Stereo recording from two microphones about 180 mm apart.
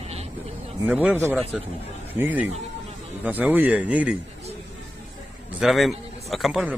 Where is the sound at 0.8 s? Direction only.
10° right (ahead or behind).